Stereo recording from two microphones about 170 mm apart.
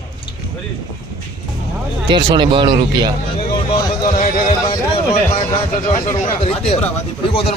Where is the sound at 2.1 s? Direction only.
25° right (ahead or behind).